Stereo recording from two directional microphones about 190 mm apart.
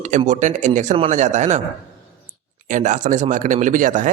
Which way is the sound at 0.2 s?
40° right (ahead or behind).